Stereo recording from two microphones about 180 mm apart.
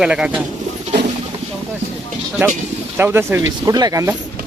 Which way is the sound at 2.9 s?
10° right (ahead or behind).